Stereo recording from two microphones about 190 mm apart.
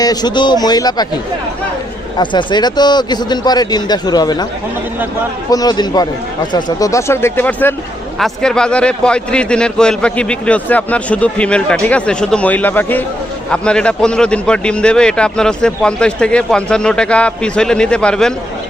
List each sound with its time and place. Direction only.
0.0 s a man's voice: 20° left (ahead or behind)
2.1 s a man's voice: 25° left (ahead or behind)
5.5 s a man's voice: 20° left (ahead or behind); by 18.3 s 5° left (ahead or behind)